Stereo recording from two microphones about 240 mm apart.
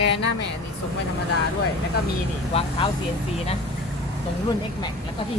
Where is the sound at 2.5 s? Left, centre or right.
Left.